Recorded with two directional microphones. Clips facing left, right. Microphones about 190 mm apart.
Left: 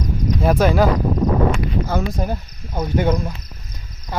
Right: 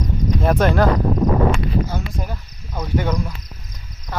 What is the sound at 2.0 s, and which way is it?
Speech, 30° left (ahead or behind).